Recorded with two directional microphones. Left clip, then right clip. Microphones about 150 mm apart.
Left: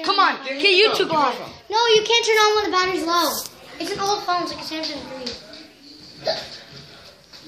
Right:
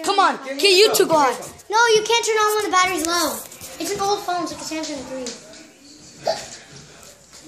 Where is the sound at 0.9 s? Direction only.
65° right (ahead or behind).